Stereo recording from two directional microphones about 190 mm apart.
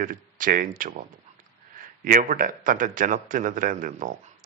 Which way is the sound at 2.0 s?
45° right (ahead or behind).